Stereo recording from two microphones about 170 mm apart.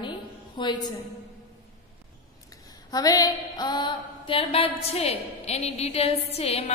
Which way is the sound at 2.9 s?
20° left (ahead or behind).